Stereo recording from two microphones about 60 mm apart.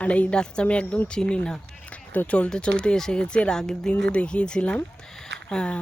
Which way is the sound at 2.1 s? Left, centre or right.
Left.